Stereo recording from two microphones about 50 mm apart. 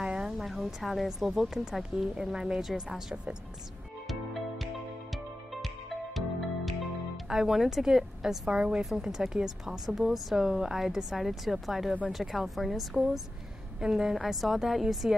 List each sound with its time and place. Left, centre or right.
0.0 s a sound: centre
0.4 s speech: centre
4.1 s music: centre
7.2 s a woman's voice: centre